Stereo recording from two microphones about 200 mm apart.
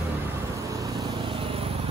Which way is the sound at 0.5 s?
15° right (ahead or behind).